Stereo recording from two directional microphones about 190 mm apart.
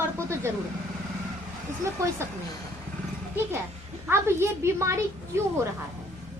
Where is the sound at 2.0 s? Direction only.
15° right (ahead or behind).